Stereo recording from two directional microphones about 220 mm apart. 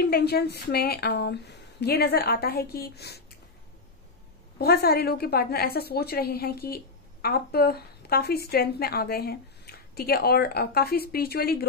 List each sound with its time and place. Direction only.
0.0 s a woman's voice: 45° left (ahead or behind)
4.6 s a woman's voice: 45° left (ahead or behind)